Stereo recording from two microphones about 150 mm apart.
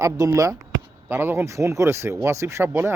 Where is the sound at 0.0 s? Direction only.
20° right (ahead or behind).